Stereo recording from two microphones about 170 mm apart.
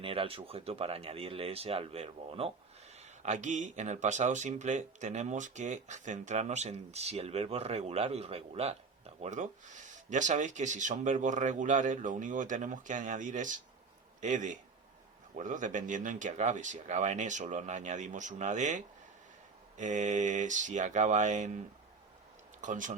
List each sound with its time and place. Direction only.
0.0 s speech: 35° right (ahead or behind)
3.0 s a man's voice: 45° right (ahead or behind)
22.6 s speech: 50° right (ahead or behind)